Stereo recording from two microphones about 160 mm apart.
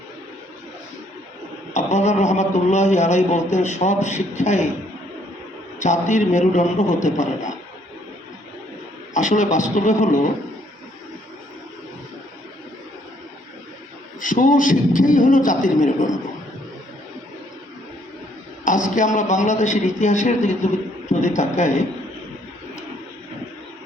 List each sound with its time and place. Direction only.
1.7 s a man's voice: 45° left (ahead or behind)
5.8 s a man's voice: 50° left (ahead or behind)
9.1 s a man's voice: 50° left (ahead or behind)
14.2 s speech: 55° left (ahead or behind)
18.6 s a man's voice: 55° left (ahead or behind)